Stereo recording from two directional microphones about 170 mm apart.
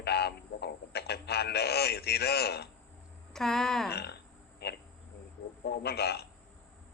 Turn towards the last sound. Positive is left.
turn(degrees=70)  # may be behind; listen again after turning